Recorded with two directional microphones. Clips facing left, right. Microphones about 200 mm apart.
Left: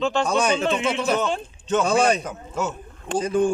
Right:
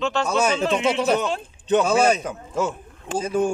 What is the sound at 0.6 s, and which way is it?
Speech, 35° right (ahead or behind).